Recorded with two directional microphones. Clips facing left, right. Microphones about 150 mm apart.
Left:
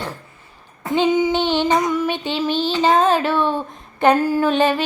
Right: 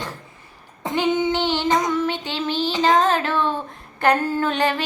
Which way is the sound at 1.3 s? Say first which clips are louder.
Left 3 dB; 15° left (ahead or behind).